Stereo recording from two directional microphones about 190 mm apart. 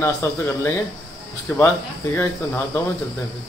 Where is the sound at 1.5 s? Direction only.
10° left (ahead or behind).